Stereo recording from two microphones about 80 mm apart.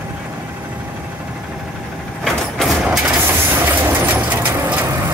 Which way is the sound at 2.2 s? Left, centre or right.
Centre.